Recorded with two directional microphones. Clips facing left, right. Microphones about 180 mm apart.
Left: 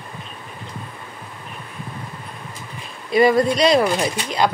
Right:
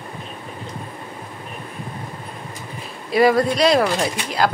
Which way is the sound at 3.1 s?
Centre (ahead or behind).